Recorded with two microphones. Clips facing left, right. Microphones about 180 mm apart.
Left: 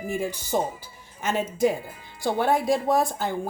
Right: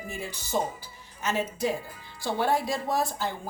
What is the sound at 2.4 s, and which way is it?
Speech, 55° left (ahead or behind).